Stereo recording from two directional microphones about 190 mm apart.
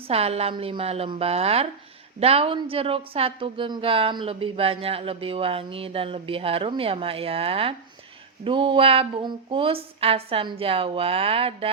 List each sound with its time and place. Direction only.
0.1 s a woman's voice: 30° right (ahead or behind)